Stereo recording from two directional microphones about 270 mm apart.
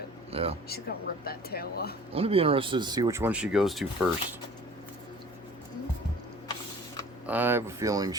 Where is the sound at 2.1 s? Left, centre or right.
Right; by 3.8 s centre.